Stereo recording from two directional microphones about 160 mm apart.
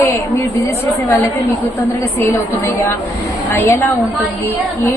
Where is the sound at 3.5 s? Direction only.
15° left (ahead or behind).